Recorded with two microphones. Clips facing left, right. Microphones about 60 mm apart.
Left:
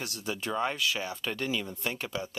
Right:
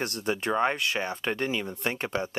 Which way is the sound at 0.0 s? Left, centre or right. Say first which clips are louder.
Right 6 dB; right.